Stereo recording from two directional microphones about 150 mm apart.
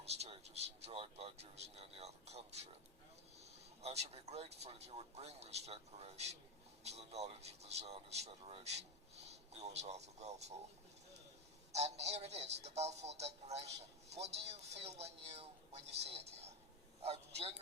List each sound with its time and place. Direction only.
0.0 s speech: 45° right (ahead or behind)
11.7 s speech: 45° right (ahead or behind)